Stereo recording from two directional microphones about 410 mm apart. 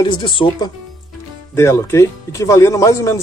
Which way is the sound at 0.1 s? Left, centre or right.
Centre.